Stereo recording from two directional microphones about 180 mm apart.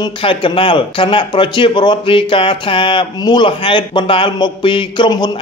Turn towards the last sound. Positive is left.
turn(degrees=25)  # may be behind; listen again after turning